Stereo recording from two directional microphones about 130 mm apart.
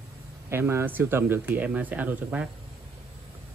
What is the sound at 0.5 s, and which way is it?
Speech, 20° right (ahead or behind).